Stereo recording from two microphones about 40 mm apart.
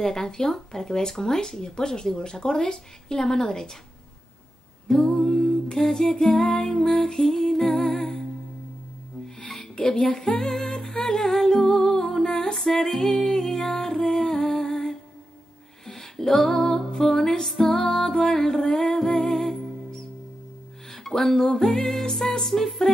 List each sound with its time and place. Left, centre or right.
0.0 s speech: centre
4.8 s a capella: centre
5.1 s speech: centre
9.6 s music: centre
12.5 s speech: centre
13.3 s music: centre
16.4 s speech: centre
17.5 s music: centre
20.9 s speech: centre